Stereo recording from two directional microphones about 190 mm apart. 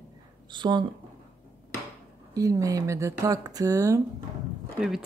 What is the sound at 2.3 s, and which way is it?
Speech, 15° right (ahead or behind).